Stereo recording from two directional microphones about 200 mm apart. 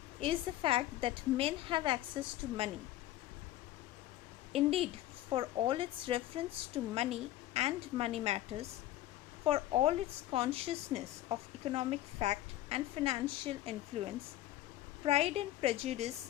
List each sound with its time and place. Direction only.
0.2 s speech: 25° right (ahead or behind)
4.5 s a woman's voice: 30° right (ahead or behind)